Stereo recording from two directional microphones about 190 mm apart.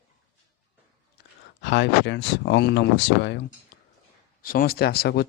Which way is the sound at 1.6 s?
65° left (ahead or behind).